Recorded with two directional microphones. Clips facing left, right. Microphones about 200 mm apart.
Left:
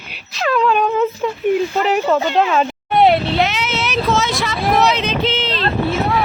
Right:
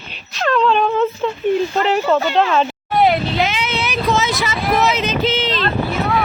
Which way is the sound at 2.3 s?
5° left (ahead or behind).